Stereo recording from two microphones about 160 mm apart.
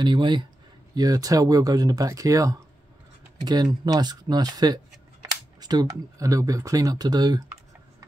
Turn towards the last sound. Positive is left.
turn(degrees=-25)  # may be behind; listen again after turning